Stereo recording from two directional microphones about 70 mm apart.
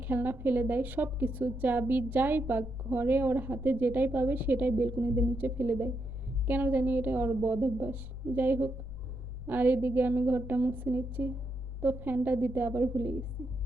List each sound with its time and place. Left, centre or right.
0.0 s a woman's voice: right